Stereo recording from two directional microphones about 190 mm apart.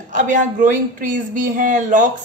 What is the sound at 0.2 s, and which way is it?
A woman's voice, 45° right (ahead or behind).